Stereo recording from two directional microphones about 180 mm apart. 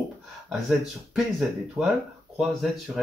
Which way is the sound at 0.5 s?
Centre (ahead or behind).